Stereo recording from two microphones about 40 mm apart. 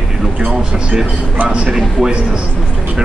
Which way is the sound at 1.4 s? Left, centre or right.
Right.